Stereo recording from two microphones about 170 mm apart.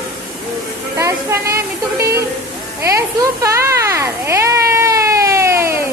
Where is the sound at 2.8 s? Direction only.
15° right (ahead or behind).